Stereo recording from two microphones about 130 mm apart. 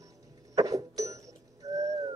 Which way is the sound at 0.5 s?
25° right (ahead or behind).